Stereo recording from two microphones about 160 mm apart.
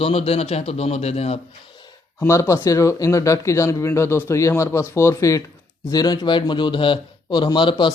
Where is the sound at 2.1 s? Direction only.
15° left (ahead or behind).